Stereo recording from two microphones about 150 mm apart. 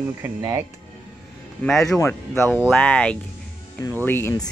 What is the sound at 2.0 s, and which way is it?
Speech, 15° left (ahead or behind).